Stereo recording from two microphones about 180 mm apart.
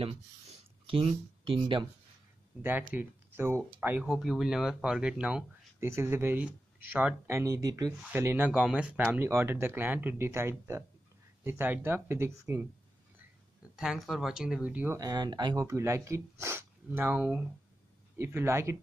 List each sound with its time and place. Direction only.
0.8 s speech: 30° right (ahead or behind)
2.6 s speech: 10° right (ahead or behind)
4.0 s speech: centre (ahead or behind)
13.7 s speech: centre (ahead or behind)
15.0 s speech: 20° right (ahead or behind)